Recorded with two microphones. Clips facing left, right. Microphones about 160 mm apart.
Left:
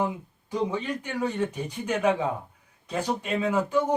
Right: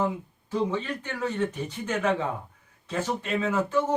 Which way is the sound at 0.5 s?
10° left (ahead or behind).